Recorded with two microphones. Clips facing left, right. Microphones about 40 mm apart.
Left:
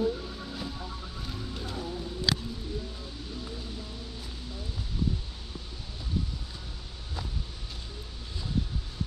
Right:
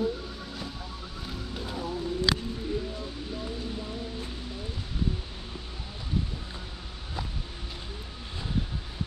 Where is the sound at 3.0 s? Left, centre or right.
Right.